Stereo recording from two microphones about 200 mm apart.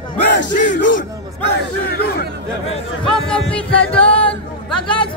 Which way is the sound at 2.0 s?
55° left (ahead or behind).